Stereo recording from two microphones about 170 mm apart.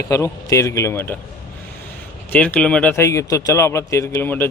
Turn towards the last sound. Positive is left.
turn(degrees=15)  # may be behind; listen again after turning